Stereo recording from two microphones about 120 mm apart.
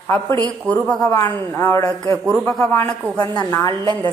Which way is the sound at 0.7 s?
10° left (ahead or behind).